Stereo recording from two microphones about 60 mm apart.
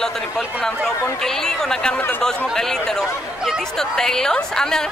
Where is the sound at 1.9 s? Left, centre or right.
Left.